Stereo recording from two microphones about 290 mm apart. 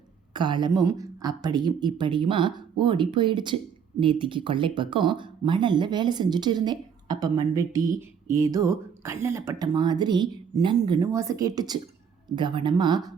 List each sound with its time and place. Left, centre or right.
0.3 s speech: centre